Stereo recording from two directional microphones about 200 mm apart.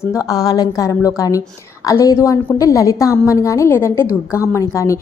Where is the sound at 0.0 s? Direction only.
15° left (ahead or behind).